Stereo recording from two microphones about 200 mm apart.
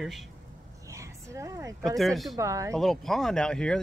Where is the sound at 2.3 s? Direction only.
15° right (ahead or behind).